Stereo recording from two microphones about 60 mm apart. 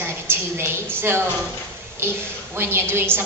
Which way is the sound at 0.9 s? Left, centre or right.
Right.